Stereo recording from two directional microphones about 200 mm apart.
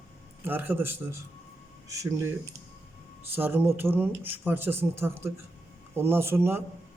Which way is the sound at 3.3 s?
10° right (ahead or behind).